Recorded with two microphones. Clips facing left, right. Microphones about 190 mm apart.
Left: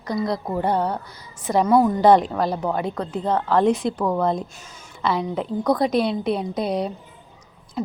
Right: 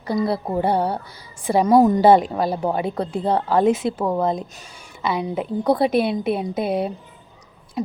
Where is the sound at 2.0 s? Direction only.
5° right (ahead or behind).